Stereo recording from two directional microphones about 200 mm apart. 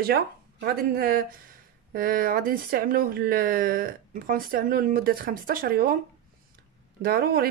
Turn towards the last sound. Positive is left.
turn(degrees=-50)  # may be behind; listen again after turning